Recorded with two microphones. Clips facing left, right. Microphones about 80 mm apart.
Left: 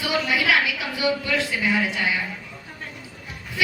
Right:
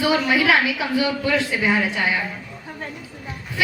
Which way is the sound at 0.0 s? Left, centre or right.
Right.